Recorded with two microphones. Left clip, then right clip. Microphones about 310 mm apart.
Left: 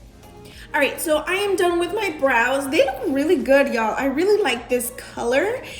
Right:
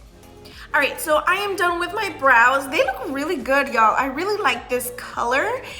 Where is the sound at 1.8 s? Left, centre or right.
Right.